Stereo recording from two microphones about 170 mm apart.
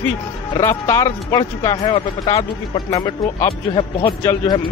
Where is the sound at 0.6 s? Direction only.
15° left (ahead or behind).